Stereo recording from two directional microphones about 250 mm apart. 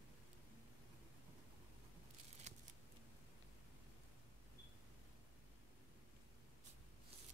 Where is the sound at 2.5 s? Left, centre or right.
Right.